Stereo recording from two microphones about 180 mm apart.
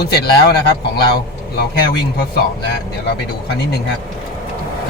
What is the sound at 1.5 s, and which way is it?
Speech, 65° left (ahead or behind).